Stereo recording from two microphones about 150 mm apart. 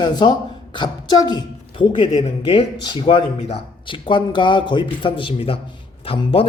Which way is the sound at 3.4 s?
40° left (ahead or behind).